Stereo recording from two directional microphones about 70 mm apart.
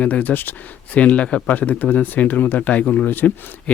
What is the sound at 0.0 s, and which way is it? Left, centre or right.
Speech, left.